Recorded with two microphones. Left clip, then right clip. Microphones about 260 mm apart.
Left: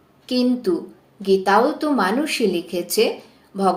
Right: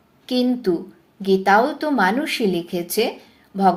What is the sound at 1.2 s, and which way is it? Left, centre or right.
Speech, right.